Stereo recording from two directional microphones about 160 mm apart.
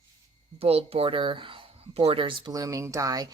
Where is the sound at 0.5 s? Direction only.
40° right (ahead or behind).